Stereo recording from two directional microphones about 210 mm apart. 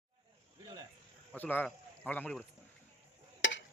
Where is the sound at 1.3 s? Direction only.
10° left (ahead or behind).